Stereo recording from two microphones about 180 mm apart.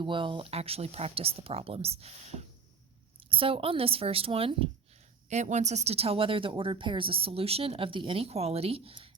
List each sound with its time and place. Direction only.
0.0 s speech: 25° right (ahead or behind)